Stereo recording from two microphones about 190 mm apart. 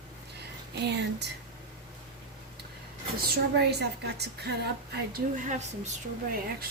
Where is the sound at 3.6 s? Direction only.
60° right (ahead or behind).